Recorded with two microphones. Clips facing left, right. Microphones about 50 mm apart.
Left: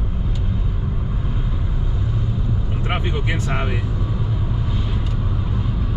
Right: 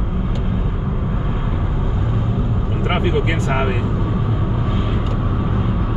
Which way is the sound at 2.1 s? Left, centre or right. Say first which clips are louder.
Right 3 dB; right.